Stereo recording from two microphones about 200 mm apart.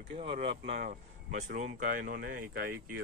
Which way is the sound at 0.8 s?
40° right (ahead or behind).